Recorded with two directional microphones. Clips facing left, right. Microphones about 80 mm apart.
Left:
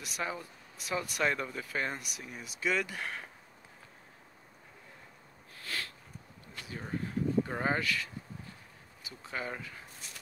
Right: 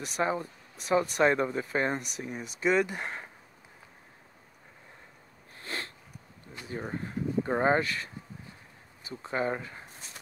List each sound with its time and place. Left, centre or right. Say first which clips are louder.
0.0 s speech: right 8 dB; right
5.6 s a sound: right 2 dB; right
6.5 s speech: right 3 dB; right